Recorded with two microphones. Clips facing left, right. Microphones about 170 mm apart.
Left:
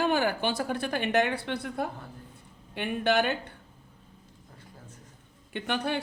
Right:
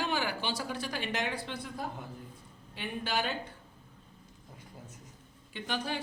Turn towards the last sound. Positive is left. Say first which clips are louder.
# left 5 dB
turn(degrees=65)  # may be behind; listen again after turning